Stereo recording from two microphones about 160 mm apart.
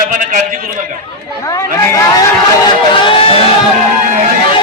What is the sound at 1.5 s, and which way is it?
Speech, 20° left (ahead or behind).